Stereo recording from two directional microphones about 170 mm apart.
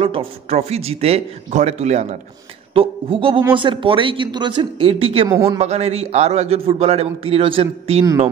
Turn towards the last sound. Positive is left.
turn(degrees=-35)  # may be behind; listen again after turning